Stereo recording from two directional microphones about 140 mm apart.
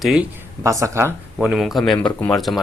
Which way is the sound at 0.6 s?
20° right (ahead or behind).